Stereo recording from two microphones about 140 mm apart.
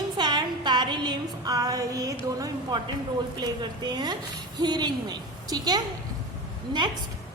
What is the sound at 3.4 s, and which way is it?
A woman's voice, 30° right (ahead or behind).